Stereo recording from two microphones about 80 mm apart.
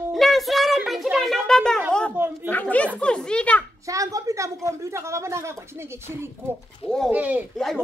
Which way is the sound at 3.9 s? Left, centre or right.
Right.